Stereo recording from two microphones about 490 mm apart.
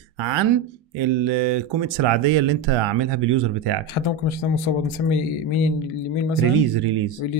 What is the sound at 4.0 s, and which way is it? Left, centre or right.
Speech, left.